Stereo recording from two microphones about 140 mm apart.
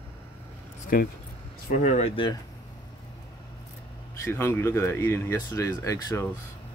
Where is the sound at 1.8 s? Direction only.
55° left (ahead or behind).